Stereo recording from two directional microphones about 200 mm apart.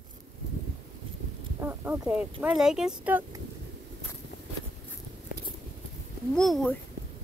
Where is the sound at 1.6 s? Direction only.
10° right (ahead or behind).